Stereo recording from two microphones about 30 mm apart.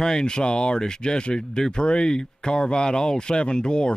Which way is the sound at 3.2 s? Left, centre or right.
Left.